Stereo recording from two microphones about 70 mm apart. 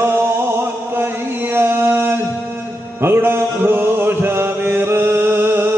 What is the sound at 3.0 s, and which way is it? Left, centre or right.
Mantra, right.